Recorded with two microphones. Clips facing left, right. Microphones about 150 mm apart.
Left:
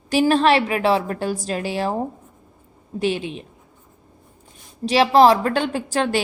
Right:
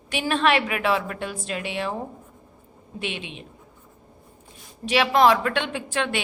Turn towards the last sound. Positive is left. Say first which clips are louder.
# left 5 dB
turn(degrees=40)  # may be behind; listen again after turning